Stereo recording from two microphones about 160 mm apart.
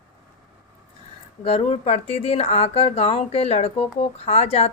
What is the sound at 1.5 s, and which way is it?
Speech, 40° left (ahead or behind).